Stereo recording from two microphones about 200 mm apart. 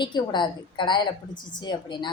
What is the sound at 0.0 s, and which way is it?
Speech, 20° left (ahead or behind).